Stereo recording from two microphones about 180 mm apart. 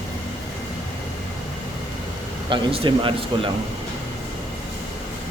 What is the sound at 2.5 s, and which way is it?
Speech, 30° right (ahead or behind).